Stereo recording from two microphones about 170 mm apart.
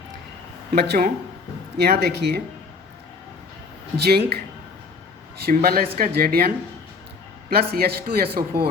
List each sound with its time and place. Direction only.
0.8 s speech: 70° right (ahead or behind)
3.9 s speech: 70° right (ahead or behind)
5.5 s speech: 60° right (ahead or behind)
7.5 s speech: 65° right (ahead or behind)